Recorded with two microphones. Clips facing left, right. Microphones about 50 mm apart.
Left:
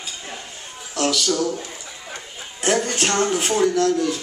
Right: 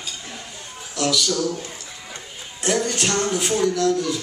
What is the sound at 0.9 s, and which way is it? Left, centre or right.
Speech, left.